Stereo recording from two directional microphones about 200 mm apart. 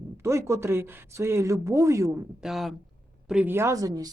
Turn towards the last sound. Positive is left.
turn(degrees=-20)  # may be behind; listen again after turning